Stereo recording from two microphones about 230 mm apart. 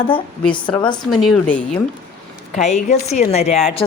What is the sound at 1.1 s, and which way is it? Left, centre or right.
Speech, centre.